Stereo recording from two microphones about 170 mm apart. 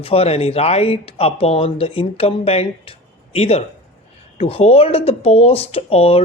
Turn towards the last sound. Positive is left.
turn(degrees=35)  # may be behind; listen again after turning